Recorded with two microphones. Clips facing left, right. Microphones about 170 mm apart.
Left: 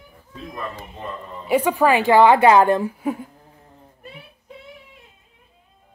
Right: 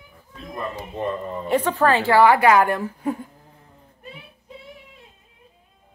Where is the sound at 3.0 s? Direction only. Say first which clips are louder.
Left 1 dB; 5° left (ahead or behind).